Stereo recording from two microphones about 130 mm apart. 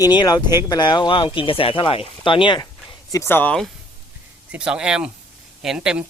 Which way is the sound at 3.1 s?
20° left (ahead or behind).